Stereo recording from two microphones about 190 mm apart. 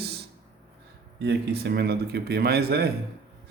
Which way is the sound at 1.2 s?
60° right (ahead or behind).